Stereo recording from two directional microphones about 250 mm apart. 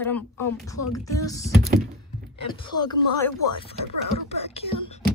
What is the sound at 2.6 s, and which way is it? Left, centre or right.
A woman's voice, centre.